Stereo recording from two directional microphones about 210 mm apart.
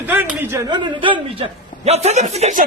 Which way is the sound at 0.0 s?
10° right (ahead or behind).